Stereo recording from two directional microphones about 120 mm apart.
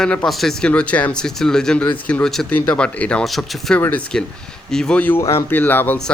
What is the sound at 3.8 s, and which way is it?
Speech, 15° left (ahead or behind).